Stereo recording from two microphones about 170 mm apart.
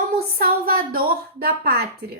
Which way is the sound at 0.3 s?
60° right (ahead or behind).